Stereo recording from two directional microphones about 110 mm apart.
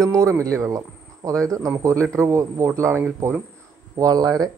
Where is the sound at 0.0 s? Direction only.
30° right (ahead or behind).